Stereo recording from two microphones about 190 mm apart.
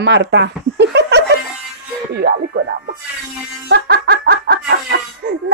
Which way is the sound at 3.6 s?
60° right (ahead or behind).